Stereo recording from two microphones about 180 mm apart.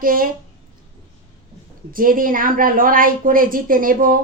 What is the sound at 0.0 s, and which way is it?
Speech, 50° right (ahead or behind).